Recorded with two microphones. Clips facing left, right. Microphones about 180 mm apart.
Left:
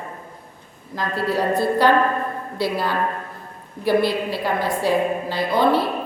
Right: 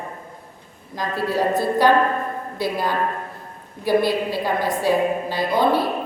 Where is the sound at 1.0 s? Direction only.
15° right (ahead or behind).